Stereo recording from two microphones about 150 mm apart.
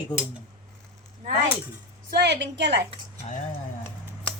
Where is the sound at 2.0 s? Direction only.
90° right.